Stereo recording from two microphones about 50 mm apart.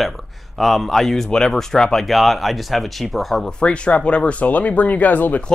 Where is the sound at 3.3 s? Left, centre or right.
Centre; by 5.4 s left.